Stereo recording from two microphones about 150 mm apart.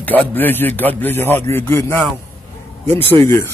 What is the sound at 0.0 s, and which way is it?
A man's voice, 10° left (ahead or behind).